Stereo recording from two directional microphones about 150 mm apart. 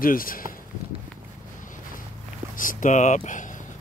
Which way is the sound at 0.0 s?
70° left (ahead or behind).